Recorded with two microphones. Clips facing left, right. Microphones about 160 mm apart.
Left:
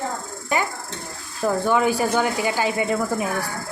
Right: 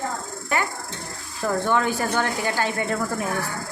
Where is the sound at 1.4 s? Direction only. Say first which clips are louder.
Left 3 dB; 10° left (ahead or behind).